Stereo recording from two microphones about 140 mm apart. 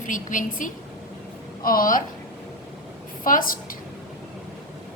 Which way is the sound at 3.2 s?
80° left.